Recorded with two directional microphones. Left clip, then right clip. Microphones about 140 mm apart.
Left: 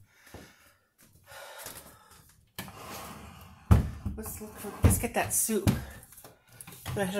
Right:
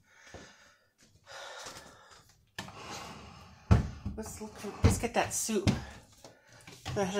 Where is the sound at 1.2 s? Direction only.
35° right (ahead or behind).